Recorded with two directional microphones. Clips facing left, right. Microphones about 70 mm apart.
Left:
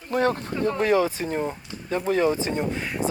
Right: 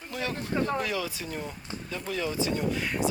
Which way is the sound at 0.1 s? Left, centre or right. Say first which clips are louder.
Left 8 dB; left.